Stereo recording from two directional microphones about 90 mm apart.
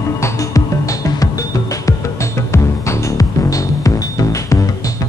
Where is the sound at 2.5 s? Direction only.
30° left (ahead or behind).